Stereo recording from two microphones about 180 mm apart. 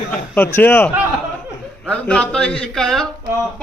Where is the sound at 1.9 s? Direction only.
5° left (ahead or behind).